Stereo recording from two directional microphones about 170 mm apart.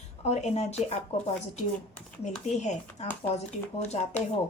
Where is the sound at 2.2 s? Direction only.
40° left (ahead or behind).